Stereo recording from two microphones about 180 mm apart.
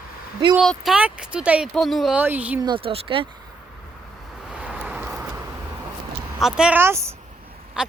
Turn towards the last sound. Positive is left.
turn(degrees=-5)  # may be behind; listen again after turning